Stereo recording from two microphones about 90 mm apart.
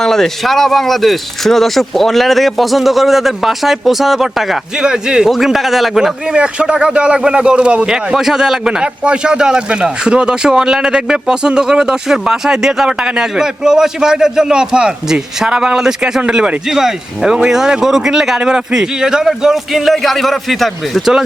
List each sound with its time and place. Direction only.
0.0 s speech: 5° left (ahead or behind)